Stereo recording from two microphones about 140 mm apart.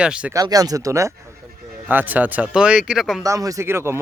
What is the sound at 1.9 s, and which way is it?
Speech, 10° right (ahead or behind).